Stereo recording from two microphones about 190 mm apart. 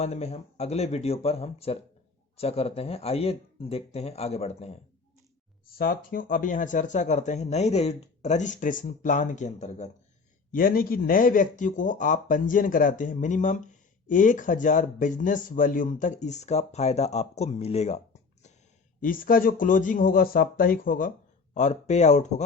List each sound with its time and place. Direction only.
0.0 s speech: 35° left (ahead or behind)
5.7 s speech: 50° left (ahead or behind)
10.5 s speech: 50° left (ahead or behind)
18.9 s speech: 45° left (ahead or behind)